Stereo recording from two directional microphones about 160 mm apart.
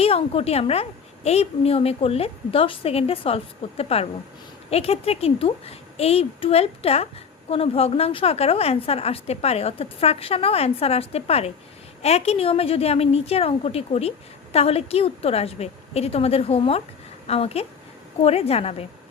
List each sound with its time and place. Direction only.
0.0 s a woman's voice: 35° left (ahead or behind)